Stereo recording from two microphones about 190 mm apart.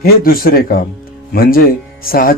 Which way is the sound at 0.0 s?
50° left (ahead or behind).